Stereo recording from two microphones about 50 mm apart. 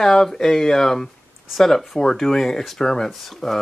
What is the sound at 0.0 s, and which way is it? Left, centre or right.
Speech, centre.